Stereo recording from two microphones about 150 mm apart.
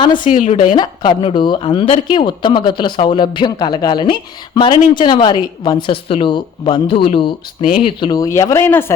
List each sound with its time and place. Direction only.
0.0 s speech: 30° left (ahead or behind)
0.3 s a woman's voice: 45° left (ahead or behind)
0.8 s speech: 30° left (ahead or behind); by 8.9 s 15° left (ahead or behind)